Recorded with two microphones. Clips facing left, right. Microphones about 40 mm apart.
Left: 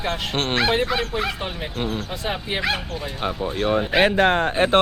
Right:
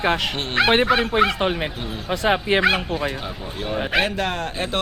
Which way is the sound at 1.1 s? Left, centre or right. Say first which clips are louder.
Right 7 dB; right.